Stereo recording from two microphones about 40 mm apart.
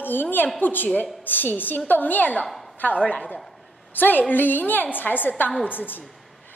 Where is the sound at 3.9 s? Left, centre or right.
Left.